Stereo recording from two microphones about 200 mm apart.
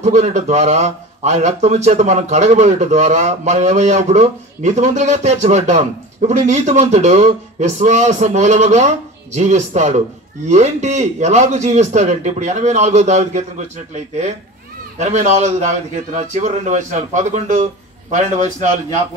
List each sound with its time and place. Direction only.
0.0 s a man's voice: 35° right (ahead or behind)